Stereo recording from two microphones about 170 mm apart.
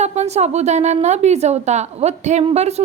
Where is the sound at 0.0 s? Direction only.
40° right (ahead or behind).